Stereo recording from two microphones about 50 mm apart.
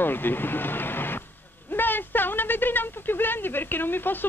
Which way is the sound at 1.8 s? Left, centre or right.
Left.